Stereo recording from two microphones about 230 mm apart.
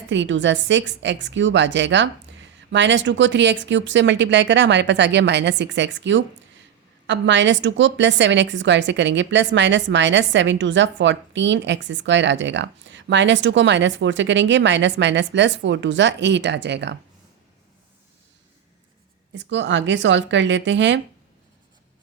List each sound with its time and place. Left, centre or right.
0.1 s a woman's voice: right
19.3 s a woman's voice: right